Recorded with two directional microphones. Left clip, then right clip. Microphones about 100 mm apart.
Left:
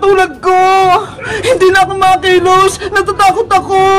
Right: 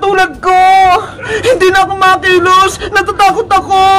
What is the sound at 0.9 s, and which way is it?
A man's voice, 35° right (ahead or behind).